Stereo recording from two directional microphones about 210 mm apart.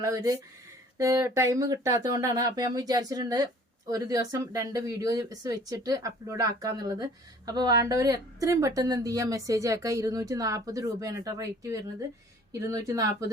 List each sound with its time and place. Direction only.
0.0 s speech: 15° right (ahead or behind)